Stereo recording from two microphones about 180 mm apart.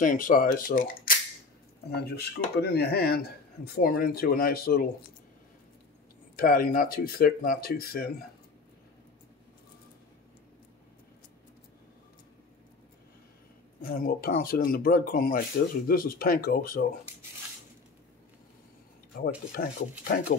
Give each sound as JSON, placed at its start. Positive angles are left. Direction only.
{"t": 0.0, "sound": "speech", "side_deg": 45}
{"t": 1.9, "sound": "speech", "side_deg": 65}
{"t": 6.3, "sound": "speech", "side_deg": 55}
{"t": 13.7, "sound": "speech", "side_deg": 55}
{"t": 19.5, "sound": "speech", "side_deg": 55}